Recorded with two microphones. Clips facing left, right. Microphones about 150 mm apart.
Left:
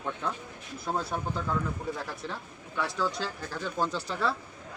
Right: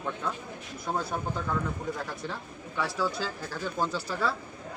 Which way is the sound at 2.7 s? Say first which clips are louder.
Right 1 dB; 5° right (ahead or behind).